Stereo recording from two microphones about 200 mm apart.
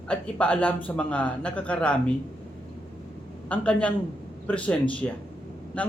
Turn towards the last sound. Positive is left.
turn(degrees=5)  # may be behind; listen again after turning